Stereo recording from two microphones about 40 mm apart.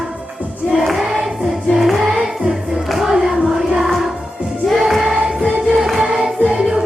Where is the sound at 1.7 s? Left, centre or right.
Centre.